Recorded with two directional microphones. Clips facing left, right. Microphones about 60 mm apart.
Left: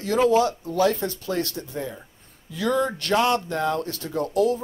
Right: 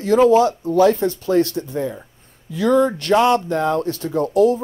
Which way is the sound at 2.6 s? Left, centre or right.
Right.